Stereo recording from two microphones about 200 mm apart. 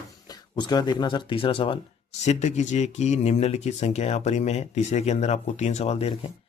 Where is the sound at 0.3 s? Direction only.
20° left (ahead or behind).